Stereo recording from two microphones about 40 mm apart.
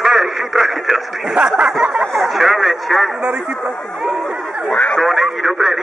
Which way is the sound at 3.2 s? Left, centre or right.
Right.